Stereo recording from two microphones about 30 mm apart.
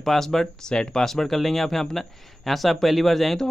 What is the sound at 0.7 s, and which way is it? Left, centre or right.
Speech, left.